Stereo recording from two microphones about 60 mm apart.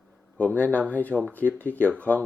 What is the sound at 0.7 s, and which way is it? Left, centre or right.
Speech, left.